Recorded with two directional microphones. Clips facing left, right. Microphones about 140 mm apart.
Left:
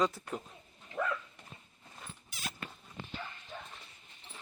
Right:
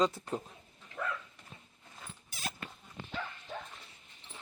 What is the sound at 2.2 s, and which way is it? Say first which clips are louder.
Dog: right 3 dB; 40° right (ahead or behind).